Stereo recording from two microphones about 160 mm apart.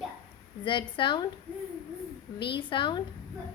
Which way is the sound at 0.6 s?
30° left (ahead or behind).